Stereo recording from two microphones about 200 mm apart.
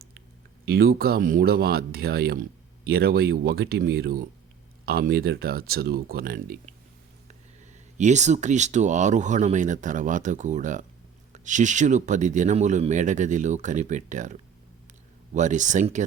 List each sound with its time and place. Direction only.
0.6 s speech: 50° right (ahead or behind)
7.9 s speech: 35° right (ahead or behind)